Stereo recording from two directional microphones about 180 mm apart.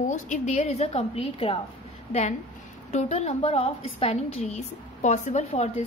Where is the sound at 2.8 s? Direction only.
40° left (ahead or behind).